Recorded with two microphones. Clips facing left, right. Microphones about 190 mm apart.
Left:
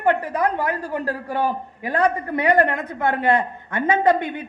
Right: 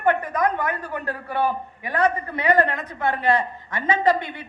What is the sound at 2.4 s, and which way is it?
A woman's voice, 50° left (ahead or behind).